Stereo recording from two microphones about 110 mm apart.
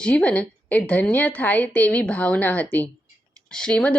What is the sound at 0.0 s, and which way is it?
A woman's voice, 10° left (ahead or behind).